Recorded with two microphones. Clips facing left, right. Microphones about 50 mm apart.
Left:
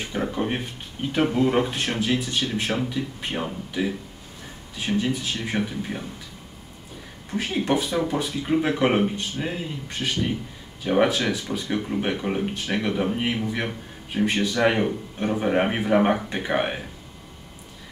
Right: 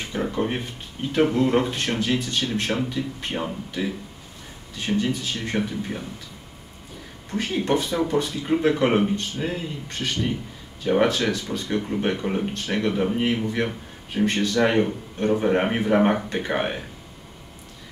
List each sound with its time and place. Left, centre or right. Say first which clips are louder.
0.1 s speech: right 1 dB; centre
7.2 s speech: even; centre